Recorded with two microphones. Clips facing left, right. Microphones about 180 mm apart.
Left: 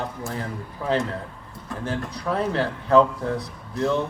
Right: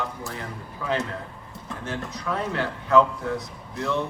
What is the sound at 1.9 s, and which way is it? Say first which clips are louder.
A man's voice: left 3 dB; 35° left (ahead or behind).